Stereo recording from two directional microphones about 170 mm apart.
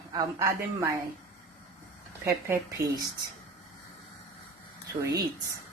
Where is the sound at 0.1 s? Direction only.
20° right (ahead or behind).